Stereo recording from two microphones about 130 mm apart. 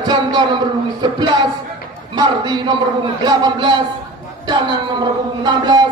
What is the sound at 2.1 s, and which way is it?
Speech, 35° right (ahead or behind).